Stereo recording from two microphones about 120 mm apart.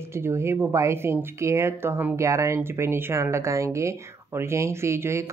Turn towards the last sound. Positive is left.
turn(degrees=-25)  # may be behind; listen again after turning